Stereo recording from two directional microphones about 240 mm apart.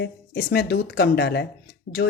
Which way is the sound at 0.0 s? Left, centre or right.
Left.